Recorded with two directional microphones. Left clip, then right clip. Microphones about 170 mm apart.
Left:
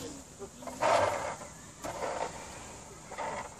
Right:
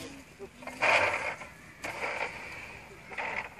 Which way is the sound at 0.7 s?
15° left (ahead or behind).